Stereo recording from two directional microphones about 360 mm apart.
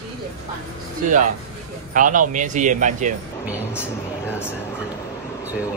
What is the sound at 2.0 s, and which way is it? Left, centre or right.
Speech, right.